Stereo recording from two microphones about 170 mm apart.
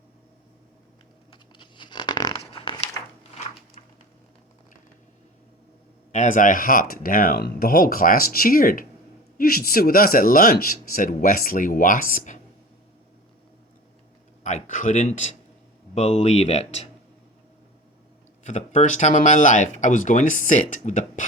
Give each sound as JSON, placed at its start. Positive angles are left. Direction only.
{"t": 1.3, "sound": "a sound", "side_deg": 30}
{"t": 2.4, "sound": "dog", "side_deg": 35}
{"t": 3.3, "sound": "a sound", "side_deg": 40}
{"t": 6.1, "sound": "speech", "side_deg": 50}
{"t": 14.4, "sound": "speech", "side_deg": 45}
{"t": 18.4, "sound": "speech", "side_deg": 45}